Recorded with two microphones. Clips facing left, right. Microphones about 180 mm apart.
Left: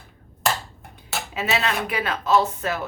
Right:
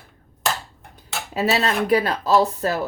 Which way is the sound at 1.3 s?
35° right (ahead or behind).